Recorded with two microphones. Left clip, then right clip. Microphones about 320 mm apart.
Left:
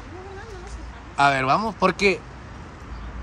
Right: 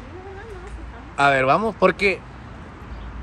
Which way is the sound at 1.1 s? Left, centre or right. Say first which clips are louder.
Right 2 dB; centre.